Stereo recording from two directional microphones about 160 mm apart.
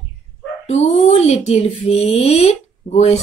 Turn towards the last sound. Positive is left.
turn(degrees=40)  # may be behind; listen again after turning